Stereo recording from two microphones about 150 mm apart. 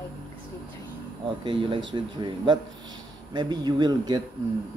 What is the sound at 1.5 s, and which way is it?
Speech, 35° right (ahead or behind).